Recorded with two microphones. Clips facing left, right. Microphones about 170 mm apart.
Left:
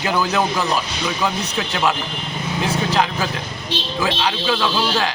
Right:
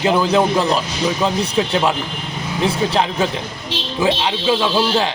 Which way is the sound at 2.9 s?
25° right (ahead or behind).